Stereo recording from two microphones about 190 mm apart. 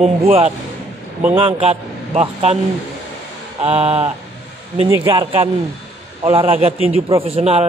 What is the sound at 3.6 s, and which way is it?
A man's voice, 30° right (ahead or behind).